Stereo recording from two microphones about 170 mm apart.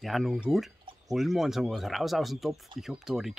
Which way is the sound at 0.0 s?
Centre (ahead or behind).